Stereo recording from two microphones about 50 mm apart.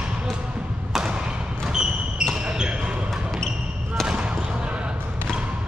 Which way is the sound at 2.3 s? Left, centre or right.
Centre.